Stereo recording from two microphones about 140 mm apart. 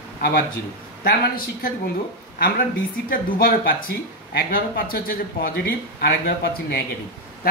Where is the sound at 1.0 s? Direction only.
90° left.